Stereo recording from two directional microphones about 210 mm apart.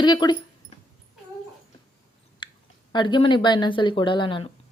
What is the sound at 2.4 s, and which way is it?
Chewing, 20° left (ahead or behind).